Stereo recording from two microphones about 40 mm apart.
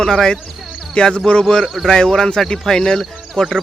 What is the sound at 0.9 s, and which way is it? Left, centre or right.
Speech, left.